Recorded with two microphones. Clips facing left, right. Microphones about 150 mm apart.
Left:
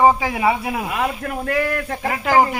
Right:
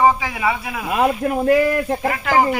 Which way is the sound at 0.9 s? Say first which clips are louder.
Right 11 dB; 25° right (ahead or behind).